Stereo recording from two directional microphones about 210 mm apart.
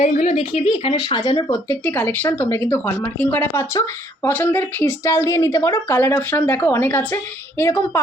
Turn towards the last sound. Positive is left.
turn(degrees=10)  # may be behind; listen again after turning